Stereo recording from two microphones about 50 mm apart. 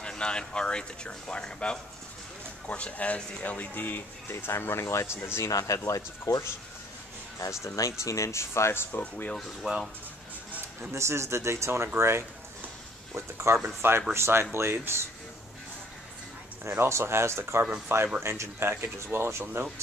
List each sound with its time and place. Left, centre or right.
0.0 s speech: centre
3.4 s speech: left
4.5 s speech: left
5.4 s speech: left
9.0 s speech: left
9.6 s speech: right
10.9 s speech: right
13.7 s speech: right
16.7 s speech: right
17.8 s speech: right